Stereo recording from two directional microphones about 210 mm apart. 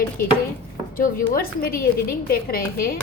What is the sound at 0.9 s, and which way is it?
A woman's voice, 45° left (ahead or behind).